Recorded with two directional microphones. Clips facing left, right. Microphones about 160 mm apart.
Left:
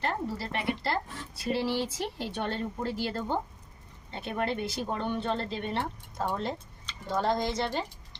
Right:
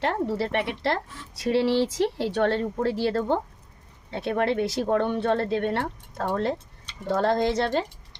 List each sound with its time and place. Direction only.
0.0 s a woman's voice: 75° right (ahead or behind)